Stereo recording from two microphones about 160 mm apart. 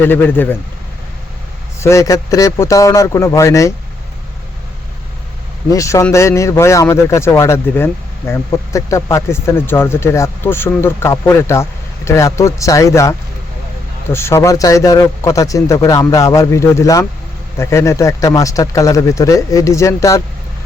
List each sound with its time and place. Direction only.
0.0 s speech: 10° left (ahead or behind)
1.8 s a man's voice: 20° left (ahead or behind)
5.7 s a man's voice: 20° left (ahead or behind)